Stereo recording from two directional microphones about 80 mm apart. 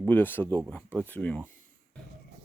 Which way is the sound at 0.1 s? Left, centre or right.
Left.